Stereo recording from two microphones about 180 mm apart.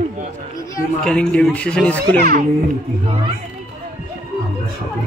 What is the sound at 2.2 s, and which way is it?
Speech, 50° right (ahead or behind).